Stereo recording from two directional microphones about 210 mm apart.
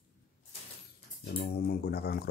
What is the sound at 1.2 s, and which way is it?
Speech, 50° left (ahead or behind).